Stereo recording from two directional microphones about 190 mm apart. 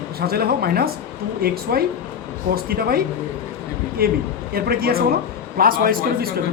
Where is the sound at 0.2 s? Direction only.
55° right (ahead or behind).